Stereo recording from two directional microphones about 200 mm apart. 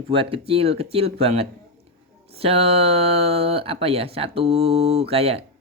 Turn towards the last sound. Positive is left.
turn(degrees=-30)  # may be behind; listen again after turning